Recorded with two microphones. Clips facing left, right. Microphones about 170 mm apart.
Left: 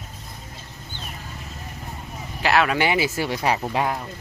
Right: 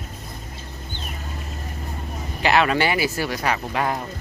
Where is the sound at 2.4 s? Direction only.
Centre (ahead or behind).